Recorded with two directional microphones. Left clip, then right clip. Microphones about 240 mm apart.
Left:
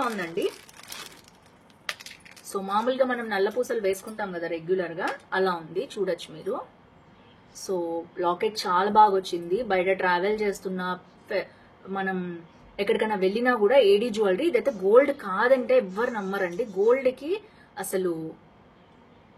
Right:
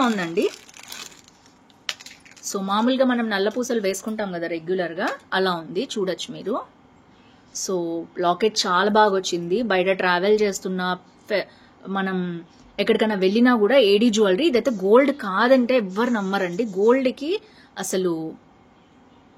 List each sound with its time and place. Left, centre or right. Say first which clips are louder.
0.0 s speech: right 6 dB; right
0.6 s crumpling: right 3 dB; centre
1.9 s typing: right 3 dB; centre
2.5 s a woman's voice: right 3 dB; right
7.6 s a woman's voice: right 3 dB; right